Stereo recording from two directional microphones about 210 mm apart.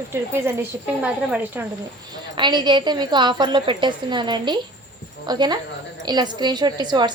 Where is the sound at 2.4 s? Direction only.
20° right (ahead or behind).